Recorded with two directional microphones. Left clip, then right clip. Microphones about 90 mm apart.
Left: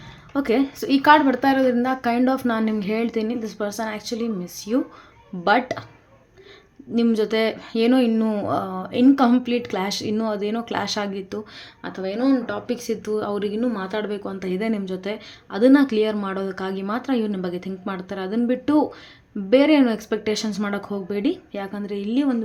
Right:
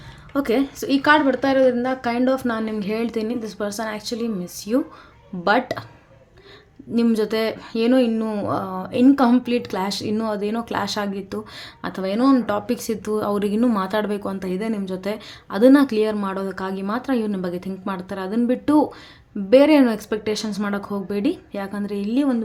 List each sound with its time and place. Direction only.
0.3 s a woman's voice: 15° right (ahead or behind)
0.9 s speech: centre (ahead or behind); by 5.8 s 25° right (ahead or behind)
6.9 s speech: 25° right (ahead or behind)
11.9 s speech: 85° right
12.6 s speech: 50° right (ahead or behind)
13.6 s speech: 75° right (ahead or behind)
14.0 s speech: 40° right (ahead or behind)
14.4 s speech: 20° right (ahead or behind)
15.0 s speech: 35° right (ahead or behind)
20.1 s speech: 15° right (ahead or behind)